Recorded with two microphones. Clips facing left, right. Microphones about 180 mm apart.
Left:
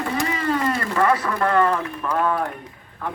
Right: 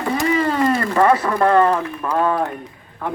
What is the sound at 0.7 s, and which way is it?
A man's voice, 40° right (ahead or behind).